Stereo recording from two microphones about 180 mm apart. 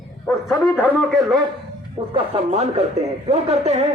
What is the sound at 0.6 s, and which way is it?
Speech, 10° left (ahead or behind).